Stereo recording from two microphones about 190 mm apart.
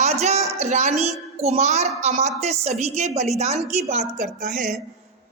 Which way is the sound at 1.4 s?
35° right (ahead or behind).